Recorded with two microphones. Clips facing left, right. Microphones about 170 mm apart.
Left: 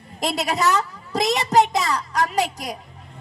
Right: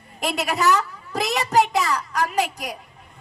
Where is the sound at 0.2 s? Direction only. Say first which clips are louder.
Left 1 dB; 35° left (ahead or behind).